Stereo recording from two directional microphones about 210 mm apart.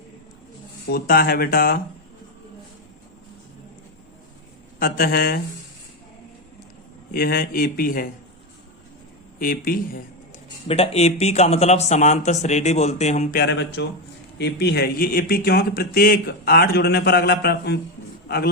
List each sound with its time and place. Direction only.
0.9 s speech: 45° left (ahead or behind)
4.8 s speech: 45° left (ahead or behind)
7.1 s speech: 45° left (ahead or behind)
9.4 s speech: 40° left (ahead or behind)
10.7 s a man's voice: 30° left (ahead or behind)
13.4 s speech: 55° left (ahead or behind)